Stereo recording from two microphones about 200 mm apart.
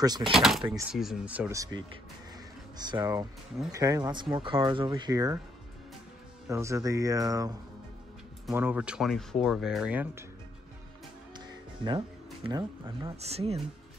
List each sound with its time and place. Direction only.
0.0 s speech: 20° right (ahead or behind)
0.3 s speech: centre (ahead or behind); by 5.4 s 20° right (ahead or behind)
6.5 s speech: 15° right (ahead or behind)
11.3 s music: 20° right (ahead or behind)
12.4 s speech: 20° right (ahead or behind)